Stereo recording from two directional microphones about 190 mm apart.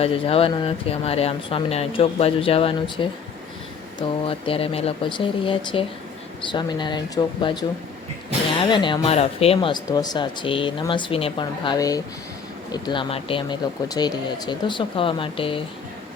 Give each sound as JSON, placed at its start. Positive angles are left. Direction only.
{"t": 0.0, "sound": "speech", "side_deg": 30}
{"t": 4.3, "sound": "speech", "side_deg": 30}